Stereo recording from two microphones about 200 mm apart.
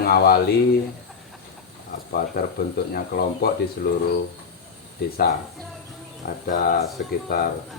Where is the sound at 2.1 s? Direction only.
50° left (ahead or behind).